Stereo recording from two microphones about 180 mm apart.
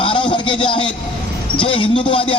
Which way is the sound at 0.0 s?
30° left (ahead or behind).